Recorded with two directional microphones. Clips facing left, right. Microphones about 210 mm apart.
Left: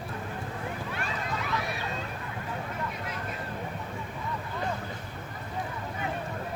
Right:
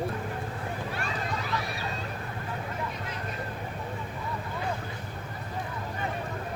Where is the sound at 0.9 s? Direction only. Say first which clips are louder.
Right 1 dB; 35° right (ahead or behind).